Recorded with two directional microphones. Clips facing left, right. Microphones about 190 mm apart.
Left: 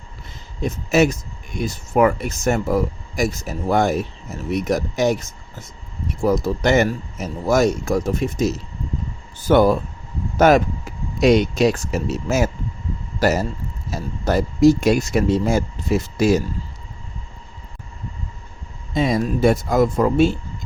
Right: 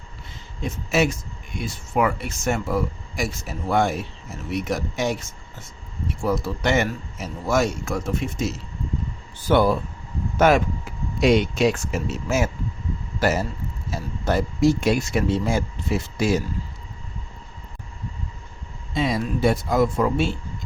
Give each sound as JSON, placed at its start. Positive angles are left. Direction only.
{"t": 0.6, "sound": "speech", "side_deg": 40}
{"t": 6.2, "sound": "speech", "side_deg": 40}
{"t": 18.9, "sound": "speech", "side_deg": 45}